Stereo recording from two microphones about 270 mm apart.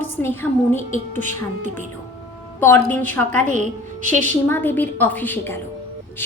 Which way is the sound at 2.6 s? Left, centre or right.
Centre.